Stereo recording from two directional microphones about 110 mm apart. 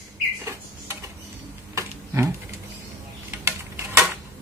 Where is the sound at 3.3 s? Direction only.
25° right (ahead or behind).